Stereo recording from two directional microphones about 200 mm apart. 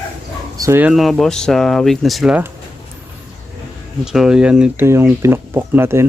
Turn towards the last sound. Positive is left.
turn(degrees=-10)  # may be behind; listen again after turning